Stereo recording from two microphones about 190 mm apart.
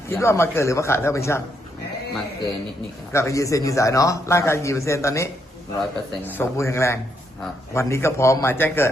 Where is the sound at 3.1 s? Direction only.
15° left (ahead or behind).